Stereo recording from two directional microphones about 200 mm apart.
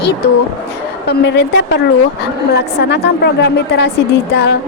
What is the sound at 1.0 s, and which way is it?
A woman's voice, 55° left (ahead or behind).